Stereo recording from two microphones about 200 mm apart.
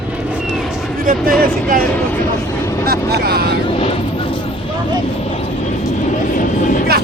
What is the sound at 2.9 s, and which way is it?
Speech, 50° right (ahead or behind).